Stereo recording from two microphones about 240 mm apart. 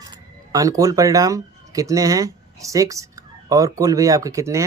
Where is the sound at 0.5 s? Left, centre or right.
Centre.